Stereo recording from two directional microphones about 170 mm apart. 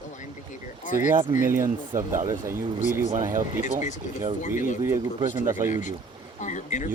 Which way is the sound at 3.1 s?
50° right (ahead or behind).